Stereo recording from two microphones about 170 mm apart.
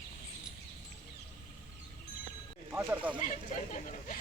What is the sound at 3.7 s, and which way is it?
Speech, 50° left (ahead or behind).